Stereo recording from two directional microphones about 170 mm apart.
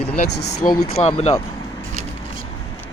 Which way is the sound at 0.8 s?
35° left (ahead or behind).